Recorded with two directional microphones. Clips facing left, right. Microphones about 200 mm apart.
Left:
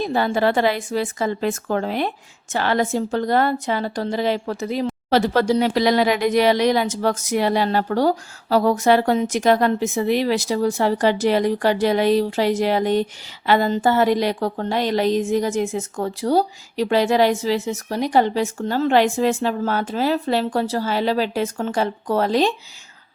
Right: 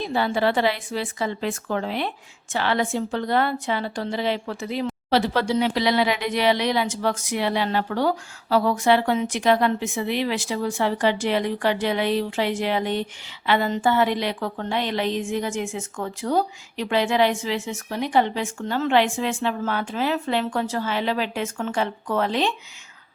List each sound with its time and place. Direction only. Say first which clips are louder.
0.0 s a woman's voice: left 3 dB; 45° left (ahead or behind)